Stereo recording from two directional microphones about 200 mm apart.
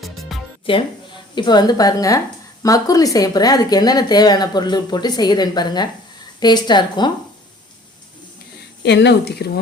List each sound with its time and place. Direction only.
0.0 s music: centre (ahead or behind)
0.7 s speech: 25° left (ahead or behind)
8.8 s speech: 60° left (ahead or behind)